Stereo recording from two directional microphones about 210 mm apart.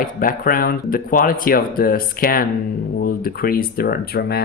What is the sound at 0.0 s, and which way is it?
Speech, 40° left (ahead or behind).